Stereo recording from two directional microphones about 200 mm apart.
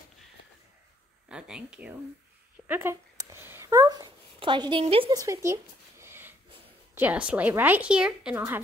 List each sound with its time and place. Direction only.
1.3 s a woman's voice: 5° right (ahead or behind)